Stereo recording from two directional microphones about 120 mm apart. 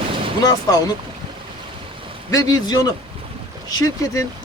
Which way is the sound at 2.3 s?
30° left (ahead or behind).